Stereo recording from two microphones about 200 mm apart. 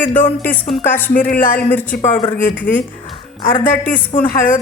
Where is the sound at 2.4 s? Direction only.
40° left (ahead or behind).